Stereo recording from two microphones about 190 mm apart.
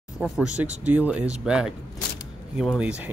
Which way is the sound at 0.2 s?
5° right (ahead or behind).